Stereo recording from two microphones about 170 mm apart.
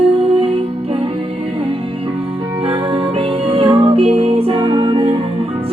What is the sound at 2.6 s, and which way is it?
Music, 35° right (ahead or behind).